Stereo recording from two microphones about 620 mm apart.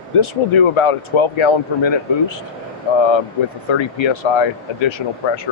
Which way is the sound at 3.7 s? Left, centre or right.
Left.